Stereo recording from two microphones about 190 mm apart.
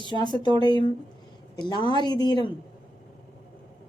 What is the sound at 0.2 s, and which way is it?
Speech, 20° left (ahead or behind).